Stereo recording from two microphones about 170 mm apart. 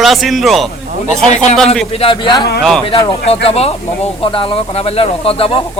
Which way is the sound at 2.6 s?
Centre (ahead or behind).